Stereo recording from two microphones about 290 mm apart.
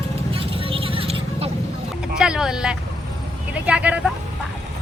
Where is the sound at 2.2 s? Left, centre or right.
Centre.